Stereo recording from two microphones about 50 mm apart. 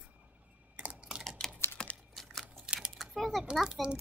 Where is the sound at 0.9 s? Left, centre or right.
Centre.